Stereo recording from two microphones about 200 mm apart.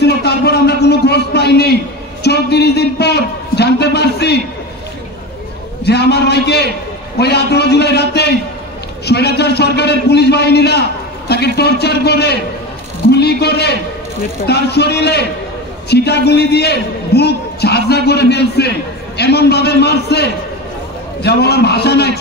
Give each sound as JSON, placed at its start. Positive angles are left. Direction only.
{"t": 0.0, "sound": "a sound", "side_deg": 55}
{"t": 2.2, "sound": "a man's voice", "side_deg": 55}
{"t": 5.9, "sound": "a man's voice", "side_deg": 55}